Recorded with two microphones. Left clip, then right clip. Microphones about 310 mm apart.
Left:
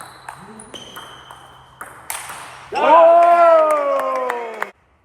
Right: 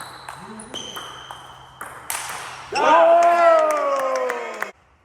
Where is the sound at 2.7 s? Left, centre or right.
Left.